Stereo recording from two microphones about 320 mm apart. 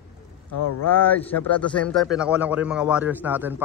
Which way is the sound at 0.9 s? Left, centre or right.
Centre.